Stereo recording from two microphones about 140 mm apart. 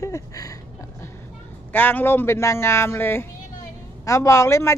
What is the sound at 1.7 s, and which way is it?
Speech, 15° left (ahead or behind).